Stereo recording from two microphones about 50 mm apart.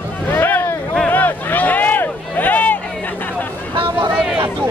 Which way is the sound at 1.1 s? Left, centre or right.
Left.